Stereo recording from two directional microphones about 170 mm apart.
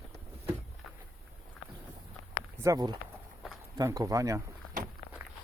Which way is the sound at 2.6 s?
20° right (ahead or behind).